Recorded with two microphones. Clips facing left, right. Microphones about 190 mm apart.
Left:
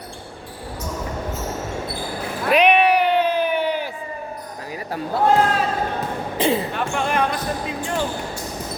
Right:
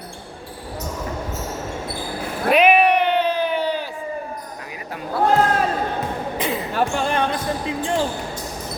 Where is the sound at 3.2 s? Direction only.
15° left (ahead or behind).